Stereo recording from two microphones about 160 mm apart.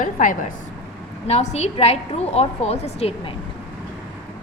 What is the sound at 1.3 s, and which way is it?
A woman's voice, 40° left (ahead or behind).